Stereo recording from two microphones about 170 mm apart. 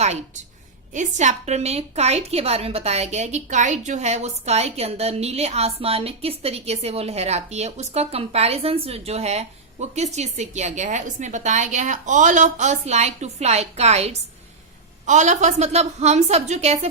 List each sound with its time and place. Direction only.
0.9 s a woman's voice: 45° right (ahead or behind)